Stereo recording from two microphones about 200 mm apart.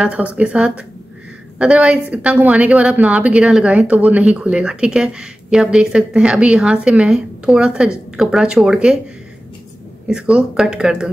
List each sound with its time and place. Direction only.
0.0 s a woman's voice: 5° right (ahead or behind)
10.0 s a woman's voice: 5° right (ahead or behind)